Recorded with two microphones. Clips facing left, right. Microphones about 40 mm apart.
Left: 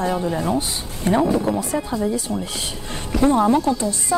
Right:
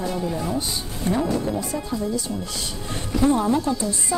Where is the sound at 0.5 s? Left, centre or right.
Left.